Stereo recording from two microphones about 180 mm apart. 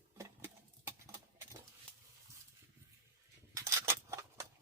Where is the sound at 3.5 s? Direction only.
15° right (ahead or behind).